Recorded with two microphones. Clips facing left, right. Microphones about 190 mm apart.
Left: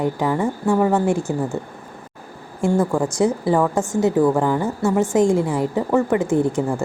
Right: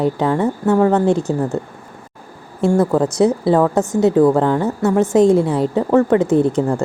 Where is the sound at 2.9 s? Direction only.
20° right (ahead or behind).